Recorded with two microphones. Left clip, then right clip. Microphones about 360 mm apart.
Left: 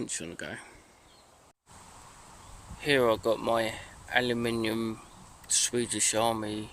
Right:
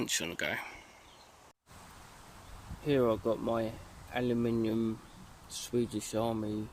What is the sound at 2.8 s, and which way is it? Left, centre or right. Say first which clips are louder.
Speech: left 5 dB; left.